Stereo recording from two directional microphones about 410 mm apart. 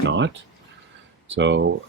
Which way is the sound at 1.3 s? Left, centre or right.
Right.